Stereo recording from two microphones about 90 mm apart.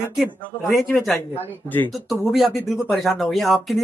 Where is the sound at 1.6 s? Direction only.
20° left (ahead or behind).